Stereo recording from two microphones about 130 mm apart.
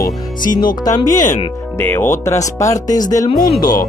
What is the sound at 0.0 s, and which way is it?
Speech, 90° left.